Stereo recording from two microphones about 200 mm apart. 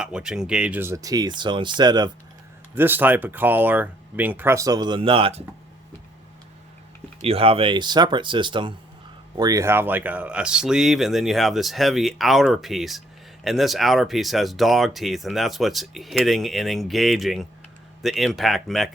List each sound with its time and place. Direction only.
0.0 s speech: 5° right (ahead or behind); by 2.0 s 20° right (ahead or behind)
2.7 s speech: 10° right (ahead or behind); by 5.4 s 25° right (ahead or behind)
7.2 s speech: 30° right (ahead or behind); by 18.9 s centre (ahead or behind)